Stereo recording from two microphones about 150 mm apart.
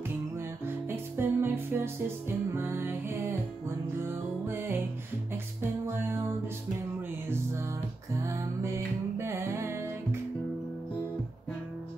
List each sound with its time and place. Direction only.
0.8 s music: 15° right (ahead or behind)
8.2 s music: 20° right (ahead or behind)